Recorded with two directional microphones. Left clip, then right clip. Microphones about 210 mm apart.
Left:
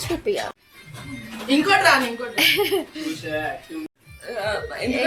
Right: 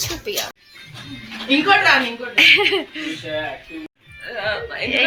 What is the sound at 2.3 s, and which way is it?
Speech, 10° left (ahead or behind).